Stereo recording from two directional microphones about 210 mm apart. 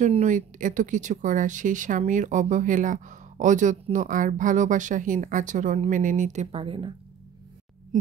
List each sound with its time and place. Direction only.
0.0 s speech: 35° right (ahead or behind)
7.9 s speech: 35° right (ahead or behind)